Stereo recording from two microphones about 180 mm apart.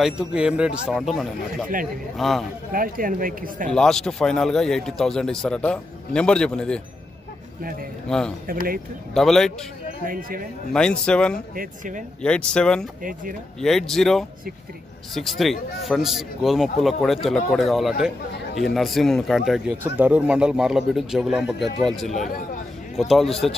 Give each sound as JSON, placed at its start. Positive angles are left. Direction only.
{"t": 0.0, "sound": "a man's voice", "side_deg": -5}
{"t": 2.7, "sound": "a man's voice", "side_deg": -50}
{"t": 3.7, "sound": "a man's voice", "side_deg": 5}
{"t": 8.5, "sound": "a man's voice", "side_deg": -55}
{"t": 9.1, "sound": "a man's voice", "side_deg": 0}
{"t": 10.0, "sound": "a man's voice", "side_deg": -50}
{"t": 10.7, "sound": "a man's voice", "side_deg": 5}
{"t": 11.5, "sound": "a man's voice", "side_deg": -45}
{"t": 12.2, "sound": "a man's voice", "side_deg": 5}